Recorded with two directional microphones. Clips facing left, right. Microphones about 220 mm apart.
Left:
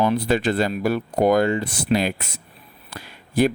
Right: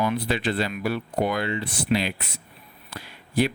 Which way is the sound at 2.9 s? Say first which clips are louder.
Left 2 dB; 45° left (ahead or behind).